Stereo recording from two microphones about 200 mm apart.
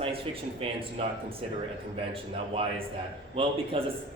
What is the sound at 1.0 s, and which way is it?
Speech, 30° right (ahead or behind).